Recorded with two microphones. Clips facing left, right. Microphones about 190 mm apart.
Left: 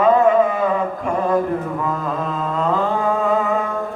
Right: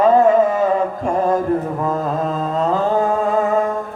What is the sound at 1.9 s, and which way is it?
Mantra, 40° right (ahead or behind).